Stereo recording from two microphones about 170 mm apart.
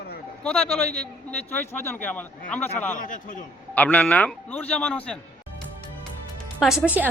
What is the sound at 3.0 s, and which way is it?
Speech, 55° left (ahead or behind).